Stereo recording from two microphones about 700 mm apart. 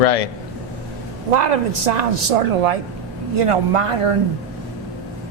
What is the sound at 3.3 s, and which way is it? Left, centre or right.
Speech, right.